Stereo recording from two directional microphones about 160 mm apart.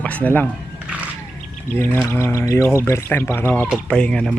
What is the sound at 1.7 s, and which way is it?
Speech, 15° left (ahead or behind).